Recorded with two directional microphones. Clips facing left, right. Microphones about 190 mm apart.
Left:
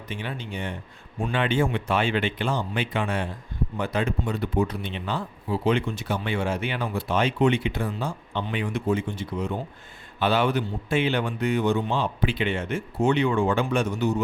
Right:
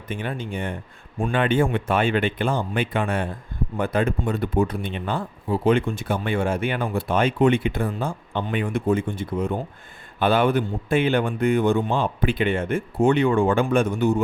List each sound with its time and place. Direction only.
0.1 s speech: 50° right (ahead or behind)